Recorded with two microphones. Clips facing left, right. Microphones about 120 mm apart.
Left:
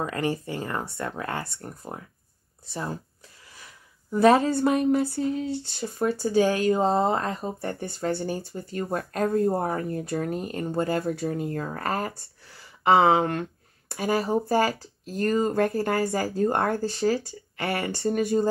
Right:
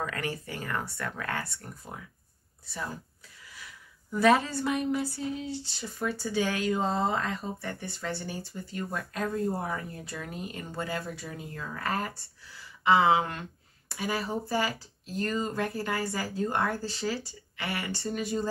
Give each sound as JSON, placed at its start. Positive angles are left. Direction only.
{"t": 0.0, "sound": "speech", "side_deg": 25}
{"t": 3.5, "sound": "a sound", "side_deg": 40}
{"t": 4.5, "sound": "speech", "side_deg": 50}